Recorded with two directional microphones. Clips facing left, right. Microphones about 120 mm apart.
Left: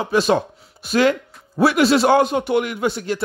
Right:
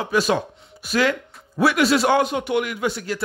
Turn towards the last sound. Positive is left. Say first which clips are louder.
# left 3 dB
turn(degrees=30)  # may be behind; listen again after turning